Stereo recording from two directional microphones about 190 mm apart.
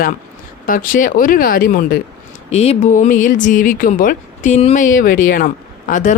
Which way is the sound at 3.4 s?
45° left (ahead or behind).